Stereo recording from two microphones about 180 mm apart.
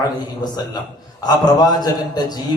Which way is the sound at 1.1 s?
20° left (ahead or behind).